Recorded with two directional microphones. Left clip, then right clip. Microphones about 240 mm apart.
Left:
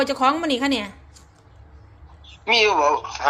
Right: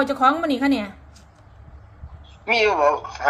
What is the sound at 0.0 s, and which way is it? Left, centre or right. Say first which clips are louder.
Speech: right 1 dB; left.